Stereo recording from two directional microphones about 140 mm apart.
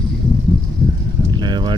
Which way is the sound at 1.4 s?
30° right (ahead or behind).